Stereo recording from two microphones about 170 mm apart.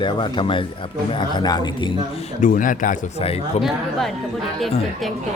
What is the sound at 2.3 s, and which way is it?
Speech, 50° left (ahead or behind).